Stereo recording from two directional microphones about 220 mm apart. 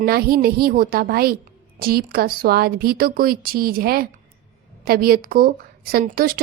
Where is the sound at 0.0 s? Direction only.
45° right (ahead or behind).